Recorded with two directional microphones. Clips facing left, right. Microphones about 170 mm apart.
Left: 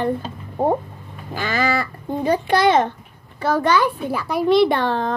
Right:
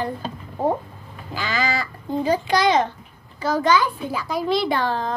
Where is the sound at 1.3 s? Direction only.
55° left (ahead or behind).